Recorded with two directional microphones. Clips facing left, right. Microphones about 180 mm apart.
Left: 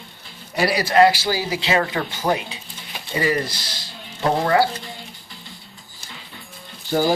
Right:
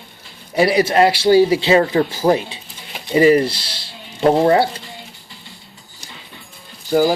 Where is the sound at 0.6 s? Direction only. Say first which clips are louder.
Right 1 dB; 25° right (ahead or behind).